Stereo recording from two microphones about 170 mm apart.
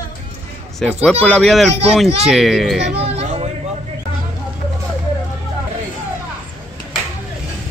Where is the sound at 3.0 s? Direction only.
40° right (ahead or behind).